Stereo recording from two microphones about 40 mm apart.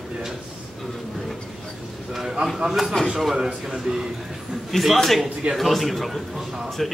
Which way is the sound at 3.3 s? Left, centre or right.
Centre.